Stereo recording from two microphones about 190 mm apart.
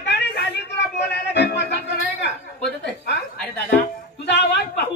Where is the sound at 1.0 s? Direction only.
60° left (ahead or behind).